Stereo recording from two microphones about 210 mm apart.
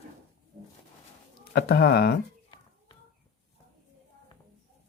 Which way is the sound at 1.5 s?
50° left (ahead or behind).